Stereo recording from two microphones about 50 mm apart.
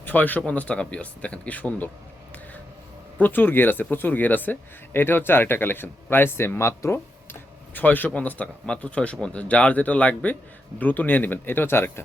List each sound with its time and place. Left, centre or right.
0.0 s speech: left
3.2 s speech: left
7.7 s speech: left
8.6 s speech: centre; by 12.0 s left